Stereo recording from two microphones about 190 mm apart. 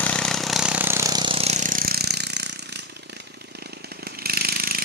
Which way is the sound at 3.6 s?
55° right (ahead or behind).